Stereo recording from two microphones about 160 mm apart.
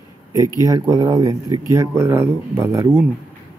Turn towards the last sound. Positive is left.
turn(degrees=-20)  # may be behind; listen again after turning